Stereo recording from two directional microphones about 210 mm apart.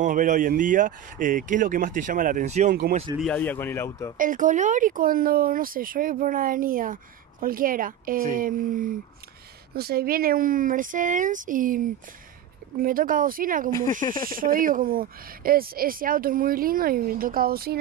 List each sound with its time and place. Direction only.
0.0 s speech: 40° right (ahead or behind)
2.7 s speech: 45° right (ahead or behind)
3.2 s speech: 5° left (ahead or behind)
4.2 s speech: 40° right (ahead or behind)
14.0 s speech: 20° left (ahead or behind)
14.4 s speech: 40° right (ahead or behind)